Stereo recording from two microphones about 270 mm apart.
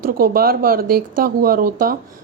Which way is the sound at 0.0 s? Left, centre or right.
Right.